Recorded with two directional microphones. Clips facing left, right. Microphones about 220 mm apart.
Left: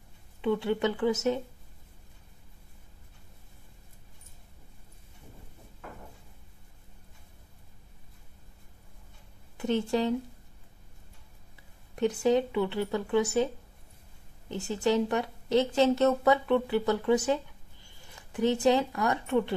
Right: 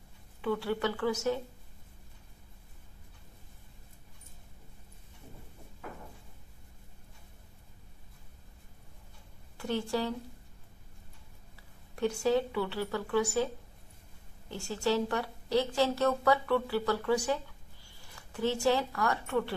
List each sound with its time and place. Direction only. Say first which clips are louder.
0.4 s speech: left 4 dB; 20° left (ahead or behind)
9.6 s speech: left 5 dB; 20° left (ahead or behind)
11.9 s speech: left 3 dB; 20° left (ahead or behind)
14.5 s speech: left 3 dB; 20° left (ahead or behind)